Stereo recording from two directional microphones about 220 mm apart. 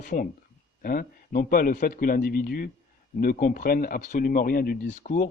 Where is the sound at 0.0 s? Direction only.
35° left (ahead or behind).